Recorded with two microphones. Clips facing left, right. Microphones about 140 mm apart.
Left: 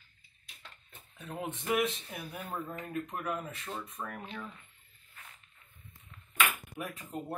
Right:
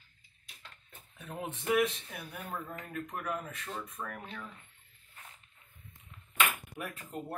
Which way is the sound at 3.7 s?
20° left (ahead or behind).